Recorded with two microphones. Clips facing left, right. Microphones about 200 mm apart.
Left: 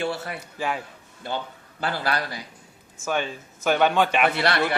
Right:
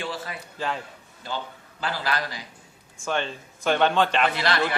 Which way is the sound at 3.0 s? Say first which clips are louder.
Left 1 dB; 10° left (ahead or behind).